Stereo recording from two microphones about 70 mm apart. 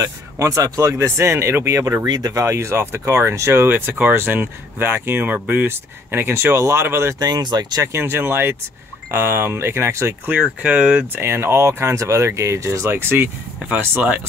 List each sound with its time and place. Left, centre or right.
0.0 s speech: right
2.0 s speech: right
2.4 s speech: right
3.6 s speech: right
7.2 s speech: right
8.0 s speech: right
10.6 s speech: centre
11.1 s speech: right
12.8 s speech: right